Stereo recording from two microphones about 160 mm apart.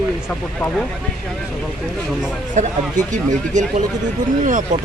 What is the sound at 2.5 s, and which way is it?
Speech, 50° right (ahead or behind).